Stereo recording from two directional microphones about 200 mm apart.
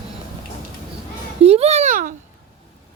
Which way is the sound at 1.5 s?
30° right (ahead or behind).